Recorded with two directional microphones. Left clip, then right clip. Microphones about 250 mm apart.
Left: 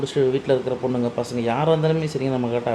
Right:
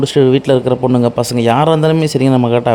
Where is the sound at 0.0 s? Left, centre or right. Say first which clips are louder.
Right 10 dB; right.